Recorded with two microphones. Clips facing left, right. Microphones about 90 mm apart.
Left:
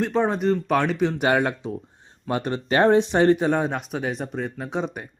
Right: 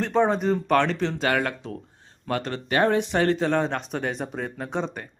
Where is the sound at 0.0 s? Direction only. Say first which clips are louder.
Even; centre (ahead or behind).